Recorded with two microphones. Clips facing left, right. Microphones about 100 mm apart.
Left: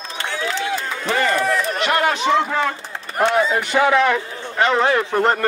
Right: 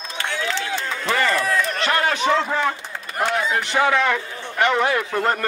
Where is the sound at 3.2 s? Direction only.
25° left (ahead or behind).